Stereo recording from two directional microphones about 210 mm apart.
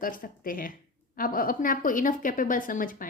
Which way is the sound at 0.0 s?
40° left (ahead or behind).